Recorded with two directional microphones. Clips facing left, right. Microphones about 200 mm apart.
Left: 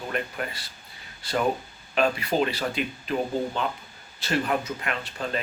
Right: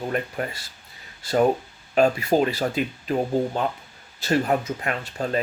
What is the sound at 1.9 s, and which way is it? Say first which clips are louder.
Speech: right 5 dB; 40° right (ahead or behind).